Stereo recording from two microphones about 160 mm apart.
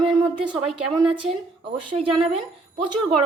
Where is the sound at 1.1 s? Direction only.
30° right (ahead or behind).